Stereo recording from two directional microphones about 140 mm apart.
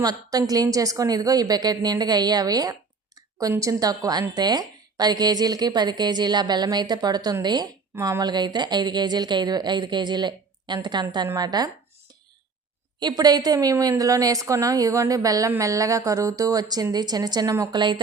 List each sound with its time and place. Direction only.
0.0 s a woman's voice: 25° right (ahead or behind)
13.0 s a woman's voice: 30° right (ahead or behind)